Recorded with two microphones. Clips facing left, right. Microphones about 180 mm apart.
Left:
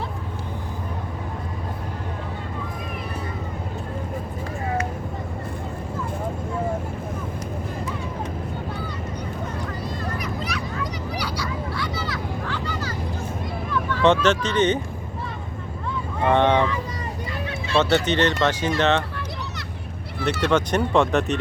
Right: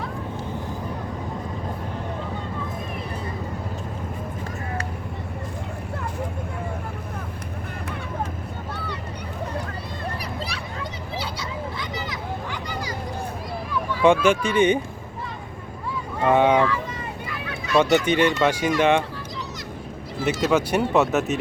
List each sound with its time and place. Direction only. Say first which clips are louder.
10.4 s a sound: left 3 dB; 30° right (ahead or behind)
13.9 s speech: right 1 dB; 10° right (ahead or behind)
16.3 s speech: right 1 dB; 10° right (ahead or behind)
17.7 s speech: right 2 dB; 10° right (ahead or behind)
20.4 s speech: even; 5° right (ahead or behind)